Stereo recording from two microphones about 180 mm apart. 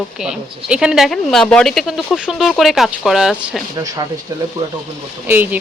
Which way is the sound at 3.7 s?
20° right (ahead or behind).